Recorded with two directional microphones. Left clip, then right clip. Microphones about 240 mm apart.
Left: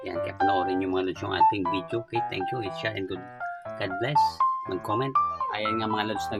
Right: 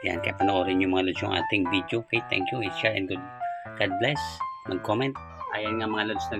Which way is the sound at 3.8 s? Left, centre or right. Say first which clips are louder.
Left 2 dB; centre.